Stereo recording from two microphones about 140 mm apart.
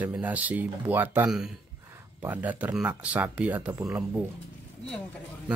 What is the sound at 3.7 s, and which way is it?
Speech, 20° right (ahead or behind).